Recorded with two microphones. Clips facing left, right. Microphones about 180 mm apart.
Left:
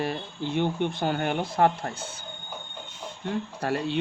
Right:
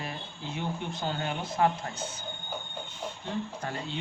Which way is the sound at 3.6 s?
70° left (ahead or behind).